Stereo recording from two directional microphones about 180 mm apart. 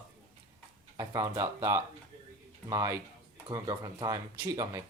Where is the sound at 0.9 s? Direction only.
20° right (ahead or behind).